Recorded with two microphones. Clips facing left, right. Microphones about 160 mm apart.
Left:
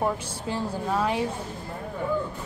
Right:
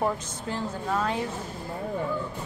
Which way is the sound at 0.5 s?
10° left (ahead or behind).